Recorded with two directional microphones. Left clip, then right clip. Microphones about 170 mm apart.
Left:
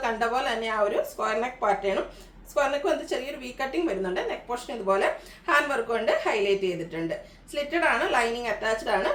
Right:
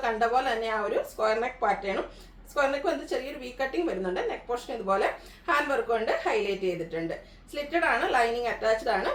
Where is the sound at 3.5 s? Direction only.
15° left (ahead or behind).